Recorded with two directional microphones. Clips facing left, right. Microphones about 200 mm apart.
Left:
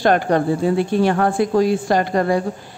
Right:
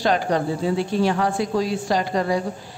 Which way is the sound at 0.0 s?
55° left (ahead or behind).